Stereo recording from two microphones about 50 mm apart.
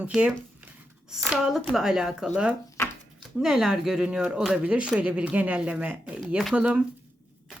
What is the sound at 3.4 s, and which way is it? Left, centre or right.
Speech, centre.